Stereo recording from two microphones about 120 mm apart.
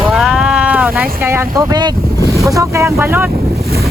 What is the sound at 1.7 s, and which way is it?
Boat, 35° right (ahead or behind).